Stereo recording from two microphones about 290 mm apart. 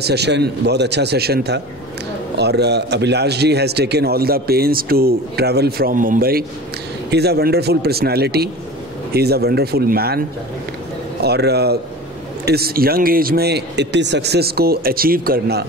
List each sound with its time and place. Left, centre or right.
0.0 s a man's voice: right
11.2 s a man's voice: right